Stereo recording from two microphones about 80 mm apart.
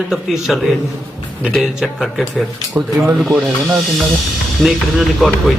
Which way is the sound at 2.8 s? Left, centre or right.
Right.